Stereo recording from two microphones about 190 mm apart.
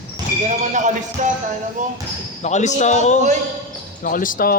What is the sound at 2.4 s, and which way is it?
A man's voice, 40° left (ahead or behind).